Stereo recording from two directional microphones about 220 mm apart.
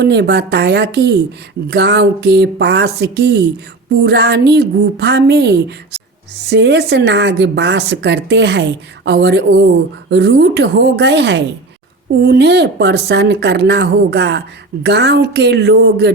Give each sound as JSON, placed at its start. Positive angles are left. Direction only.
{"t": 0.0, "sound": "a woman's voice", "side_deg": -50}